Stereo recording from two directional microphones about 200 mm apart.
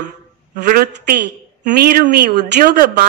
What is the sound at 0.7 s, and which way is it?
Speech, 45° right (ahead or behind).